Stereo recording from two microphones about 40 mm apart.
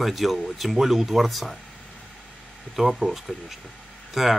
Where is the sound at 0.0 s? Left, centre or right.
Centre.